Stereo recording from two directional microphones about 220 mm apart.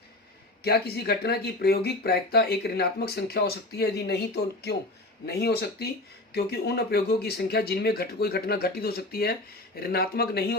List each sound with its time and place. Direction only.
0.6 s speech: 45° left (ahead or behind)